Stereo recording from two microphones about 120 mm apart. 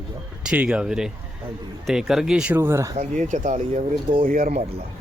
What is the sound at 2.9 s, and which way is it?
Speech, 90° right.